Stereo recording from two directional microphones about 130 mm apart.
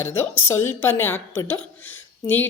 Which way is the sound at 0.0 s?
15° left (ahead or behind).